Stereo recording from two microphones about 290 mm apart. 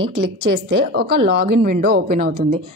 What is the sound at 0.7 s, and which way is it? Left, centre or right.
A woman's voice, right.